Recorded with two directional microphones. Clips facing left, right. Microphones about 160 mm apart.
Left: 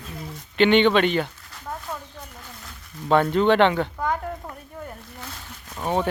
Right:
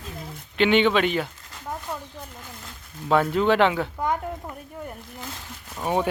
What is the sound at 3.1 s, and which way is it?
Speech, 5° right (ahead or behind).